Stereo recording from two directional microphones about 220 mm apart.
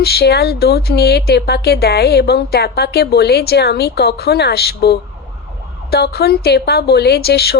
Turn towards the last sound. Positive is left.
turn(degrees=45)  # may be behind; listen again after turning